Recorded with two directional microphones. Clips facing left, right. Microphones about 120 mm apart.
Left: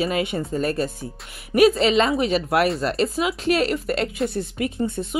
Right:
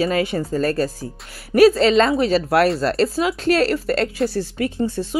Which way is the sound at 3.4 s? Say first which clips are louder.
Right 3 dB; 35° right (ahead or behind).